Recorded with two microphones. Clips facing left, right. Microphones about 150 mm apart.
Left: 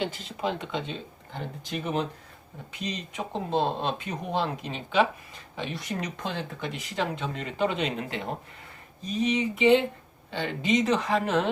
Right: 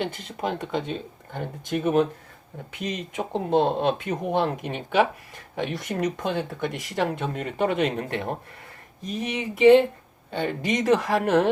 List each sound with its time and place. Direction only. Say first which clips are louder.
0.0 s speech: right 1 dB; 55° right (ahead or behind)
10.9 s speech: right 4 dB; 65° right (ahead or behind)